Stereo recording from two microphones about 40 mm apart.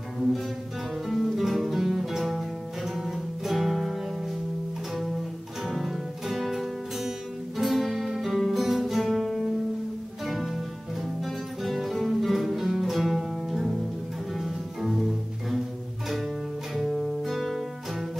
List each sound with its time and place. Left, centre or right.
1.0 s music: centre
5.7 s music: centre
16.7 s music: centre